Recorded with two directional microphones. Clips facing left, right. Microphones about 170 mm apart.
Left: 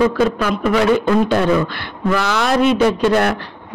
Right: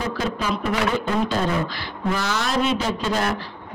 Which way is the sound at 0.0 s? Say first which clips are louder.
Left 10 dB; 60° left (ahead or behind).